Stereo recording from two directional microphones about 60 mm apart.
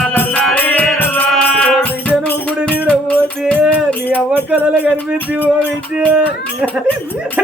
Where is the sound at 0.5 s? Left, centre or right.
Left.